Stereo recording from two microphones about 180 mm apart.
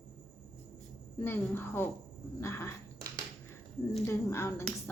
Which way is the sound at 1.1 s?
15° left (ahead or behind).